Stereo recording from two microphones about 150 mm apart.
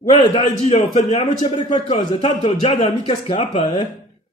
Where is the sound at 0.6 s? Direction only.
50° left (ahead or behind).